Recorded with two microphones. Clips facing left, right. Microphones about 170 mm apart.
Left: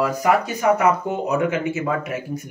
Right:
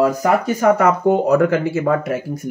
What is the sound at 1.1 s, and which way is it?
Speech, 60° right (ahead or behind).